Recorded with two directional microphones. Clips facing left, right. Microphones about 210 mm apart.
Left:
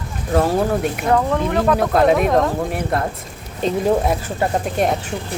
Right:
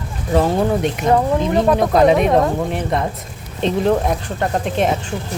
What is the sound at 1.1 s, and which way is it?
Speech, 25° right (ahead or behind).